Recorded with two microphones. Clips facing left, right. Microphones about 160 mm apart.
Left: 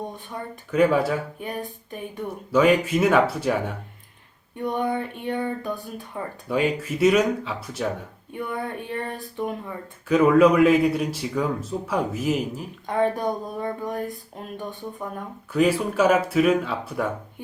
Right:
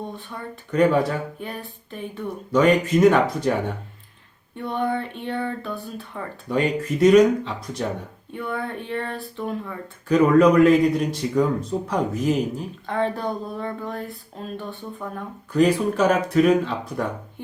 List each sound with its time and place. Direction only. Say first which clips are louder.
0.7 s speech: right 1 dB; 5° left (ahead or behind)
4.6 s speech: even; 15° left (ahead or behind)
6.5 s speech: right 1 dB; 5° left (ahead or behind)